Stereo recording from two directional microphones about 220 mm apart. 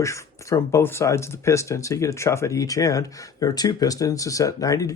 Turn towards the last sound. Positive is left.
turn(degrees=15)  # may be behind; listen again after turning